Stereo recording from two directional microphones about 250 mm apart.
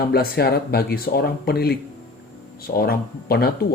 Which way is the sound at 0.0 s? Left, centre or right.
Left.